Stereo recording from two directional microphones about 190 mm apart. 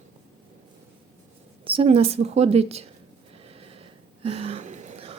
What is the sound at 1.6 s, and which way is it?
A woman's voice, 30° right (ahead or behind).